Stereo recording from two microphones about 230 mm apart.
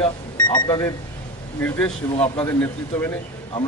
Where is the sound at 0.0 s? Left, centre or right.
Centre.